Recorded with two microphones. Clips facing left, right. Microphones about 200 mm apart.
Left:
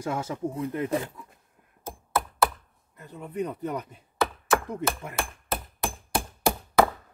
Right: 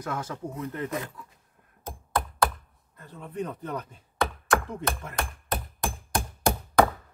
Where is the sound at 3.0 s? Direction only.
15° left (ahead or behind).